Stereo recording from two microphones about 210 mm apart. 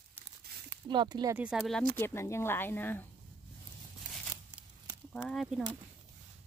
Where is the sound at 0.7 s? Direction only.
20° right (ahead or behind).